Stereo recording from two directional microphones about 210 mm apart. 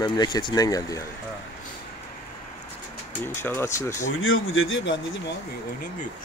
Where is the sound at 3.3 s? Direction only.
10° left (ahead or behind).